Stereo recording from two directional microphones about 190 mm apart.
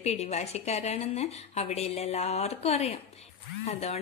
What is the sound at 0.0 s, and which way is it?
A woman's voice, 35° left (ahead or behind).